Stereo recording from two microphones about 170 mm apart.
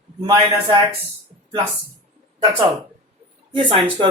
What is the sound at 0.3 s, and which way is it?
Speech, 25° right (ahead or behind).